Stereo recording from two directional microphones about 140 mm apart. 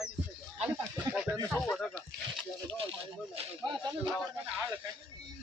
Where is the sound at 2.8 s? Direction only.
40° right (ahead or behind).